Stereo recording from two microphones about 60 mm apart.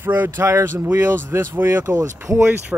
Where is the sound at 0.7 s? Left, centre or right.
Right.